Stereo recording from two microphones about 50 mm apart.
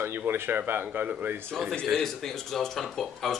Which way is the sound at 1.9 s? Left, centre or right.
Centre.